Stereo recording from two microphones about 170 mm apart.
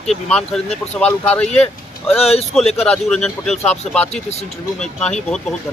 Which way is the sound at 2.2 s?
35° left (ahead or behind).